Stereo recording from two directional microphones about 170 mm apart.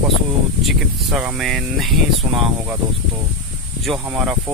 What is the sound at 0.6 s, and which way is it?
Speech, centre (ahead or behind).